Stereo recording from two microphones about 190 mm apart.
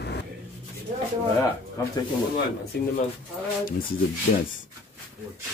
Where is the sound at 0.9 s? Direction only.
35° right (ahead or behind).